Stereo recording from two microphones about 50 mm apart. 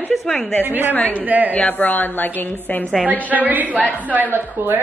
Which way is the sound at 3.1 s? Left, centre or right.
Right.